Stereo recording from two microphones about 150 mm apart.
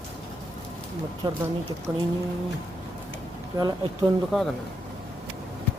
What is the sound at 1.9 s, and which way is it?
Speech, 15° right (ahead or behind).